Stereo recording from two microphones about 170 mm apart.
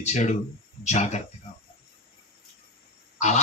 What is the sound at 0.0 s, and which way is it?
Speech, 40° left (ahead or behind).